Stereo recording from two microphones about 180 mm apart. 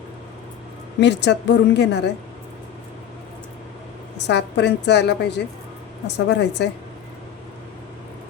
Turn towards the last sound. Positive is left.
turn(degrees=70)  # may be behind; listen again after turning